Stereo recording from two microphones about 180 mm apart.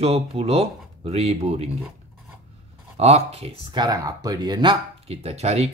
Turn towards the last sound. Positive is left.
turn(degrees=-35)  # may be behind; listen again after turning